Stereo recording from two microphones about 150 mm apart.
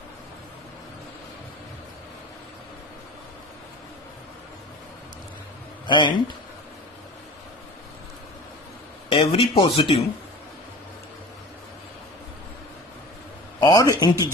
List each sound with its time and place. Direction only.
5.9 s speech: 30° left (ahead or behind)
9.0 s speech: 35° left (ahead or behind)
13.6 s a man's voice: 25° left (ahead or behind)